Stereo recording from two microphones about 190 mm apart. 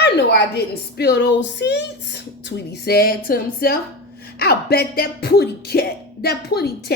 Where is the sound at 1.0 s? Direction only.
60° left (ahead or behind).